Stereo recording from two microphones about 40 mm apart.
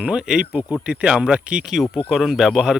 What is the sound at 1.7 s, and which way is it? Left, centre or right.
Speech, centre.